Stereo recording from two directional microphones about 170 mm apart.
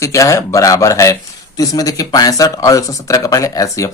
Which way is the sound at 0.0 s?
20° left (ahead or behind).